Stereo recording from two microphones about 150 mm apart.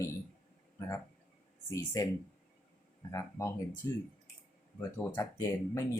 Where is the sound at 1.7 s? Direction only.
25° left (ahead or behind).